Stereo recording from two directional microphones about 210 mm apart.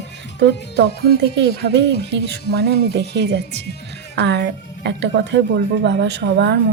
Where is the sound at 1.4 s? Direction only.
55° right (ahead or behind).